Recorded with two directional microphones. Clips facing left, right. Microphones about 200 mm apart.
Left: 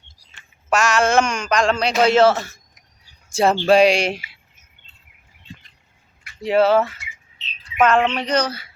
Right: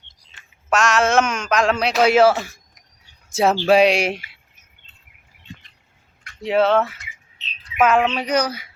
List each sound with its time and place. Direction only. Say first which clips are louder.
0.7 s a man's voice: even; centre (ahead or behind)
6.2 s speech: left 1 dB; centre (ahead or behind)